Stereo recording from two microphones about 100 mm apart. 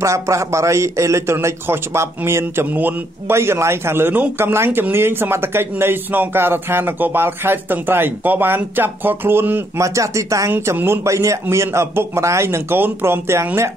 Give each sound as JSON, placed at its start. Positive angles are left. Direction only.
{"t": 0.0, "sound": "a man's voice", "side_deg": -30}